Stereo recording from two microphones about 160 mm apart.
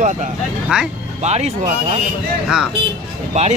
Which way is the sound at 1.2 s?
45° right (ahead or behind).